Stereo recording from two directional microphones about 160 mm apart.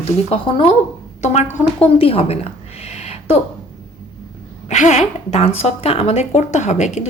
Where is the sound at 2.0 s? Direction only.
35° left (ahead or behind).